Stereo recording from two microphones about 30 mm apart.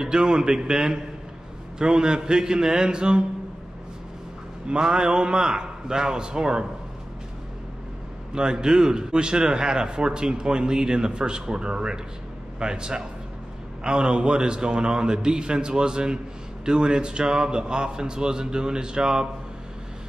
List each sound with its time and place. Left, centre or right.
0.0 s speech: right
4.6 s speech: right
8.4 s speech: right